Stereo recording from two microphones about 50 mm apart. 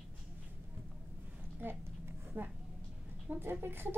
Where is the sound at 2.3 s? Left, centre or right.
Right.